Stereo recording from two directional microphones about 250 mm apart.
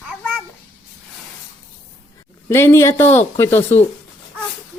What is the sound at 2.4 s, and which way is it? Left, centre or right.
Speech, centre.